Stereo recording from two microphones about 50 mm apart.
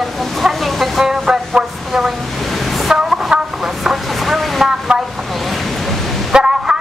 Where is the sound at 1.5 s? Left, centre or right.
Centre.